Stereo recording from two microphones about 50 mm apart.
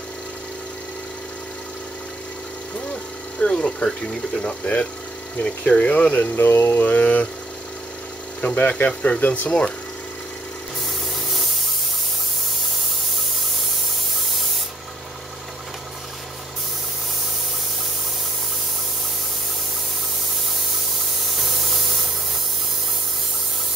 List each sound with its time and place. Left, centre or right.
2.8 s speech: left
6.3 s a sound: left
6.8 s speech: left
8.5 s speech: left
21.3 s spray: centre